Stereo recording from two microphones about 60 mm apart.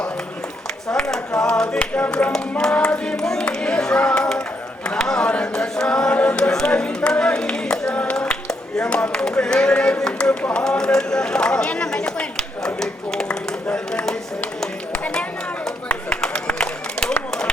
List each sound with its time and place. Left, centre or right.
0.9 s a sound: centre
1.5 s clapping: centre
3.2 s clapping: centre
3.4 s music: centre
4.9 s a sound: centre
9.4 s clapping: centre
10.0 s speech: centre
13.7 s a sound: centre
15.1 s run: centre